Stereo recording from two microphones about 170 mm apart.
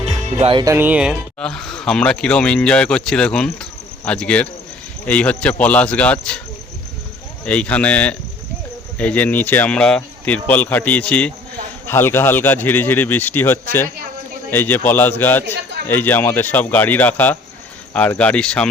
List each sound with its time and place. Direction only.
0.0 s music: 40° right (ahead or behind)
0.6 s speech: 15° right (ahead or behind)
1.4 s a man's voice: 5° left (ahead or behind)
7.4 s a man's voice: 5° left (ahead or behind)